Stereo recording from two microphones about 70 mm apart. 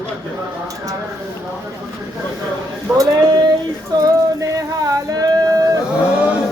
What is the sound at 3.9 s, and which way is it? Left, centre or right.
Music, right.